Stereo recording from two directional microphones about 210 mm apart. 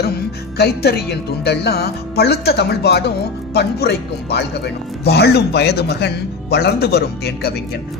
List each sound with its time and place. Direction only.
0.5 s a man's voice: 50° left (ahead or behind)